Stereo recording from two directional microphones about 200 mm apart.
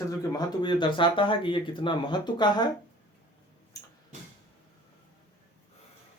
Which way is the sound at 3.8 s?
15° left (ahead or behind).